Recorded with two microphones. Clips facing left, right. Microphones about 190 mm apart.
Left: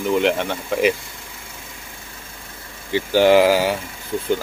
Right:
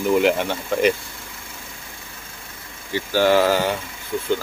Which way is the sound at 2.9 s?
15° left (ahead or behind).